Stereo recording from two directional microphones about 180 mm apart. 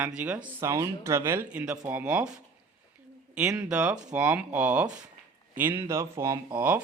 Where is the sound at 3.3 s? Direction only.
5° right (ahead or behind).